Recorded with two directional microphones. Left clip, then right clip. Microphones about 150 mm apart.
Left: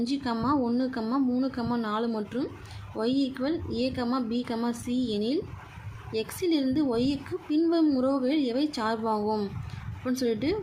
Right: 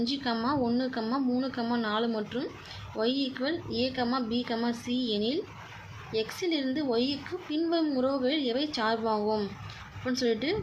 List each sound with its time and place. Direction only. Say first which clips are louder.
0.0 s a woman's voice: left 1 dB; 30° left (ahead or behind)